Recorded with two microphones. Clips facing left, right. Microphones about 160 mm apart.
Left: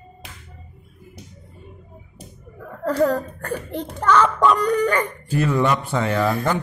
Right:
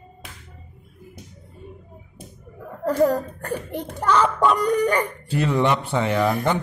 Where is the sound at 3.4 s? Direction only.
10° right (ahead or behind).